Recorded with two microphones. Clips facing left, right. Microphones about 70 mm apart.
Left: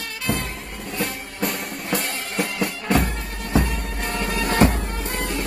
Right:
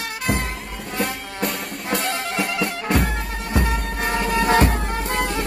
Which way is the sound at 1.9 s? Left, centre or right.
Right.